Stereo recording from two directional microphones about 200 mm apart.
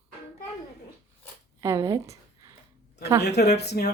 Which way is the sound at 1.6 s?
15° right (ahead or behind).